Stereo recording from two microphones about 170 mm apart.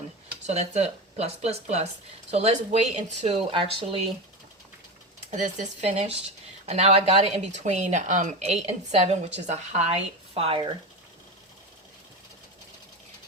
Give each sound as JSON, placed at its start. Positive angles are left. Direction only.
{"t": 0.4, "sound": "speech", "side_deg": -40}
{"t": 3.4, "sound": "speech", "side_deg": -30}
{"t": 5.3, "sound": "speech", "side_deg": -40}